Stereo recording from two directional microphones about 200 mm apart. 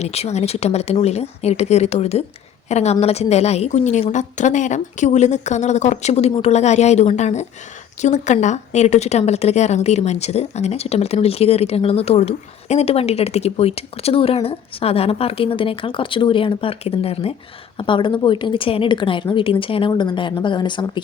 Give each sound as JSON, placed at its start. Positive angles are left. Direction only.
{"t": 0.0, "sound": "a woman's voice", "side_deg": 30}